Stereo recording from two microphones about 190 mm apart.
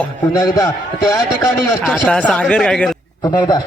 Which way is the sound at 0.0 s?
15° left (ahead or behind).